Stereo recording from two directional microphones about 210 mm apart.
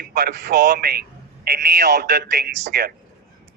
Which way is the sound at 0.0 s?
50° right (ahead or behind).